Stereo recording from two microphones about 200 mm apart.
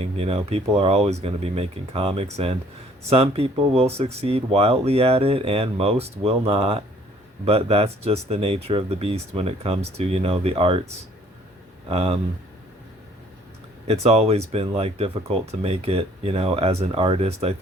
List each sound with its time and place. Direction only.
0.0 s speech: 30° right (ahead or behind)
11.9 s speech: 30° right (ahead or behind)
13.8 s speech: 30° right (ahead or behind)